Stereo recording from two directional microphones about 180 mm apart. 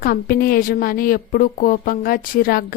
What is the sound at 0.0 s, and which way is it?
A woman's voice, 50° left (ahead or behind).